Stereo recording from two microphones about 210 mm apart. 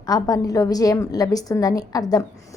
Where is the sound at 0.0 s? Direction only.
15° left (ahead or behind).